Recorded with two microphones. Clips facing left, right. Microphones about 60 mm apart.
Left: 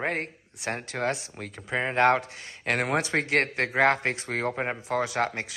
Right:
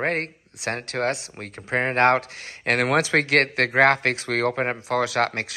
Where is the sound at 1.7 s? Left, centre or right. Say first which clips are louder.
Right 3 dB; right.